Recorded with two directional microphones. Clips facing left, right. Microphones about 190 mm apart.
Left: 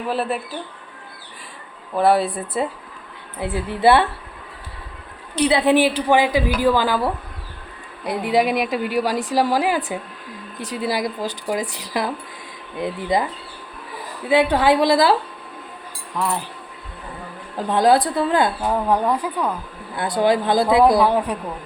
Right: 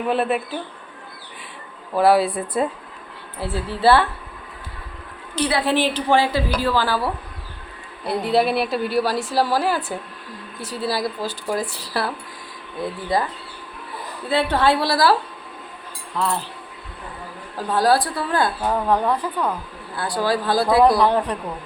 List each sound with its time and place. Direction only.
0.1 s speech: centre (ahead or behind)
2.0 s speech: 5° right (ahead or behind)
3.4 s a woman's voice: 20° left (ahead or behind)
5.4 s a woman's voice: 20° left (ahead or behind)
14.3 s a woman's voice: 15° left (ahead or behind)
16.1 s a woman's voice: 15° left (ahead or behind)
17.6 s a woman's voice: 20° left (ahead or behind)
18.6 s a woman's voice: 10° left (ahead or behind)
20.0 s a woman's voice: 20° left (ahead or behind)